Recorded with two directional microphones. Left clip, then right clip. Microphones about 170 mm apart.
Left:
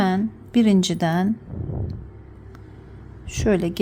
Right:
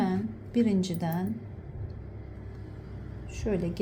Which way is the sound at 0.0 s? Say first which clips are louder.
Left 9 dB; 40° left (ahead or behind).